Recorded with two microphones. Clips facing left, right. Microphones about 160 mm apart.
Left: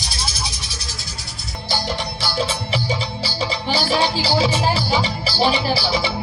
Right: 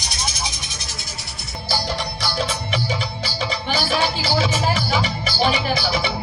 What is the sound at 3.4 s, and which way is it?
Music, 30° left (ahead or behind).